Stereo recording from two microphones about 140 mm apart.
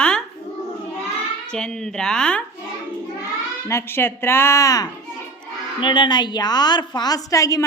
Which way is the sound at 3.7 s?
20° left (ahead or behind).